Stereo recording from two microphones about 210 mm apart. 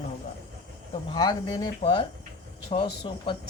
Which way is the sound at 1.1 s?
20° left (ahead or behind).